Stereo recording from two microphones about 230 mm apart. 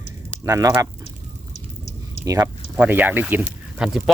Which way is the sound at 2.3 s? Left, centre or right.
Centre.